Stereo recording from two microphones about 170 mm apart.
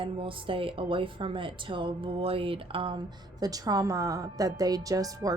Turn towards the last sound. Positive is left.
turn(degrees=-20)  # may be behind; listen again after turning